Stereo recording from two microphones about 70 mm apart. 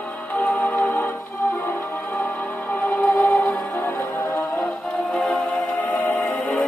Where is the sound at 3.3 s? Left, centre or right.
Left.